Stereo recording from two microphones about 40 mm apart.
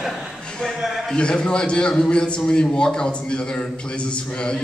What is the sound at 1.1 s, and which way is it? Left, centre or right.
A man's voice, left.